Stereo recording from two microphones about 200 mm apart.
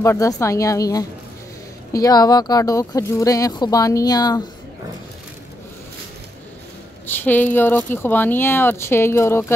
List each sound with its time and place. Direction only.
0.0 s speech: 15° left (ahead or behind)
7.1 s speech: 10° left (ahead or behind)